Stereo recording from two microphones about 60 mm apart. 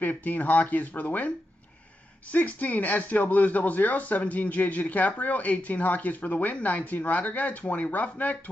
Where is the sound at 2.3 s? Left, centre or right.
Left.